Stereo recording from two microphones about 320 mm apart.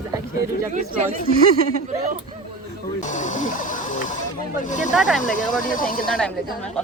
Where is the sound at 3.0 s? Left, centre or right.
Left.